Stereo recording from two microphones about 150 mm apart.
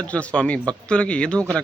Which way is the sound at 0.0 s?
10° left (ahead or behind).